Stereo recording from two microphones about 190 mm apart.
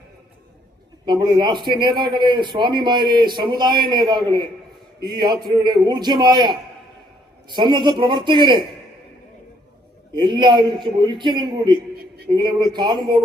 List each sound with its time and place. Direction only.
1.0 s a man's voice: 20° right (ahead or behind)
10.1 s a man's voice: 25° right (ahead or behind)